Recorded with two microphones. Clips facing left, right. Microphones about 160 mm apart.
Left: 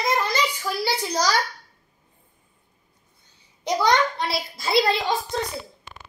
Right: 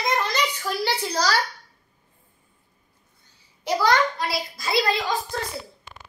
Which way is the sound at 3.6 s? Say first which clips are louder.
Even; 20° left (ahead or behind).